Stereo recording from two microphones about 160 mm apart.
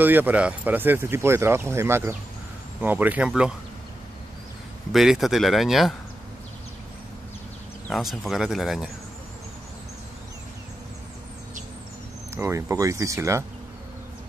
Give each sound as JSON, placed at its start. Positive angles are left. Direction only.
{"t": 0.0, "sound": "speech", "side_deg": -10}
{"t": 4.9, "sound": "speech", "side_deg": 0}
{"t": 7.9, "sound": "speech", "side_deg": 0}
{"t": 12.4, "sound": "speech", "side_deg": -15}